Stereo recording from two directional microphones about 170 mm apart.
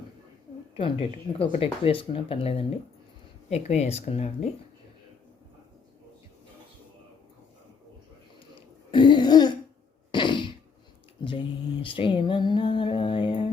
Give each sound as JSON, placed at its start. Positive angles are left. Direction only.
{"t": 0.8, "sound": "speech", "side_deg": 30}
{"t": 8.5, "sound": "throat clearing", "side_deg": 25}
{"t": 10.1, "sound": "a sound", "side_deg": 30}
{"t": 11.2, "sound": "mantra", "side_deg": 30}